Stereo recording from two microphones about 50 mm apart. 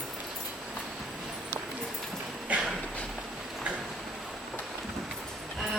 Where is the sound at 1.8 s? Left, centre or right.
Centre.